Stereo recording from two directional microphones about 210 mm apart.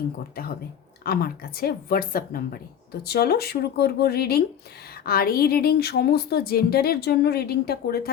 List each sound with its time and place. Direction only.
1.0 s a woman's voice: 45° left (ahead or behind)